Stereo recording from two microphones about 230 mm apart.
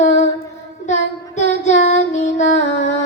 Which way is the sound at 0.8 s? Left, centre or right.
Left.